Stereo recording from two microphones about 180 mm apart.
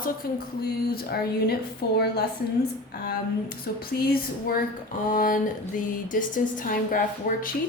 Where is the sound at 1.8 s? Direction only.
60° left (ahead or behind).